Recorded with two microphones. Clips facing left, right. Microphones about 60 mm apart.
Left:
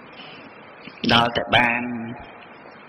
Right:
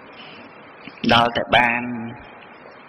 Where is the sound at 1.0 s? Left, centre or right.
Centre.